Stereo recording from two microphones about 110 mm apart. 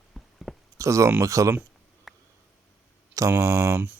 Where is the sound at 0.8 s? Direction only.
30° right (ahead or behind).